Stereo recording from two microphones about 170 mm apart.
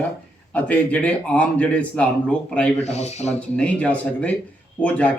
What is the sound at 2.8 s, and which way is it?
Speech, 40° left (ahead or behind).